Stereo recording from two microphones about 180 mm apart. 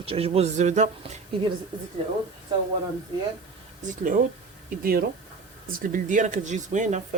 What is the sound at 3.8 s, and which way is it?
Speech, 50° right (ahead or behind).